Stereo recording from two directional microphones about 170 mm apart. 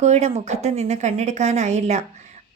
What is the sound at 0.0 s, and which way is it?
A woman's voice, 40° right (ahead or behind).